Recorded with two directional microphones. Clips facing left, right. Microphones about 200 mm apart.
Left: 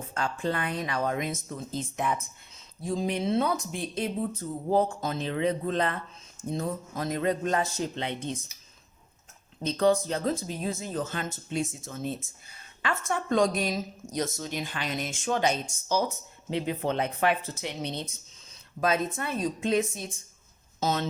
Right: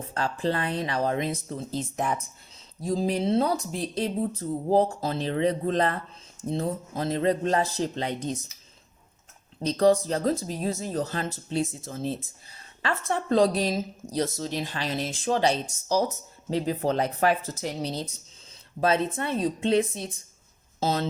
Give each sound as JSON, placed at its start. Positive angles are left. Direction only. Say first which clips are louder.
{"t": 0.1, "sound": "speech", "louder": "right 3 dB", "side_deg": -35}
{"t": 9.6, "sound": "speech", "louder": "right 3 dB", "side_deg": -40}